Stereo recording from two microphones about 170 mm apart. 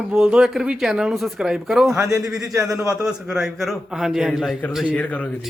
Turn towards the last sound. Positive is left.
turn(degrees=10)  # may be behind; listen again after turning